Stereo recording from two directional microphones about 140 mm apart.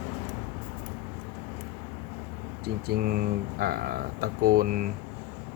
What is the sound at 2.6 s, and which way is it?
Speech, 90° right.